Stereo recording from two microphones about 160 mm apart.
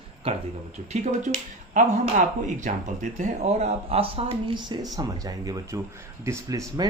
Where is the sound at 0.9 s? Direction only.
45° right (ahead or behind).